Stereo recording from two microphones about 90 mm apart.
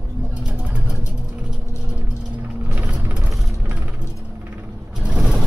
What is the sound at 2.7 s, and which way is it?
Vehicle, 15° right (ahead or behind).